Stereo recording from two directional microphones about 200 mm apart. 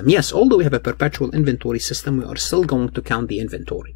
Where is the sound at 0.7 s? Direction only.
35° left (ahead or behind).